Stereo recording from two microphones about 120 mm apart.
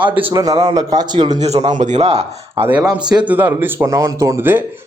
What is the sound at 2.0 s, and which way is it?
Speech, 55° right (ahead or behind).